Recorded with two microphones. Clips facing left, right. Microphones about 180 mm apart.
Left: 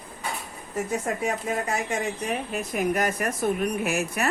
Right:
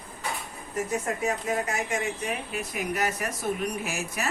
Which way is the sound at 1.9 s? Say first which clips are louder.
Left 2 dB; 40° left (ahead or behind).